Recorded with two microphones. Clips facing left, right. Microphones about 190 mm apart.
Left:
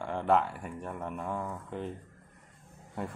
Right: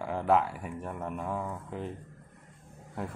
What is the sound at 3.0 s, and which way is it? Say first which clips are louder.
Speech: even; centre (ahead or behind).